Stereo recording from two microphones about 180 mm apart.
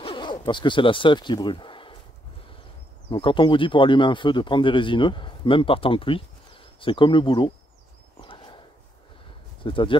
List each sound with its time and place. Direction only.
0.0 s speech: 25° left (ahead or behind)
3.1 s speech: 25° left (ahead or behind)
9.6 s speech: 30° left (ahead or behind)